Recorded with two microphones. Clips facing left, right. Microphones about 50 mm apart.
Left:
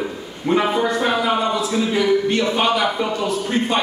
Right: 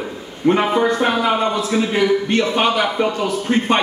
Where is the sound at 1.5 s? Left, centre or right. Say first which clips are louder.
Right 1 dB; right.